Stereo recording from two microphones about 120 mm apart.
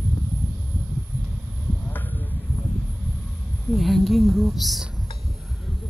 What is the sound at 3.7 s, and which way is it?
Speech, centre (ahead or behind).